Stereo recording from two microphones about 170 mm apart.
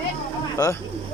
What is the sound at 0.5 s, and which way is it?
Speech, 20° left (ahead or behind).